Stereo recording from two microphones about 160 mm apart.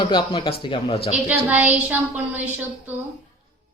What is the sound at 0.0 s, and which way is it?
Speech, 35° left (ahead or behind).